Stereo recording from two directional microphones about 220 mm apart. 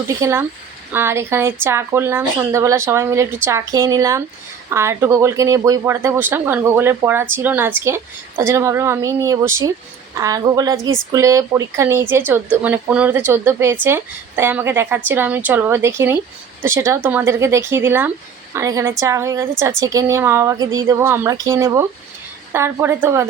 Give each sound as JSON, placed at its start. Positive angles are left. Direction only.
{"t": 0.1, "sound": "speech", "side_deg": -15}